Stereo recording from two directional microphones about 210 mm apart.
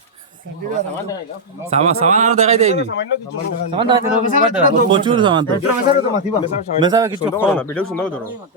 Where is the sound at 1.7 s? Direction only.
30° right (ahead or behind).